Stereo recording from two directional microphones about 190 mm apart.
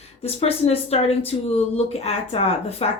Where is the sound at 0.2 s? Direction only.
35° left (ahead or behind).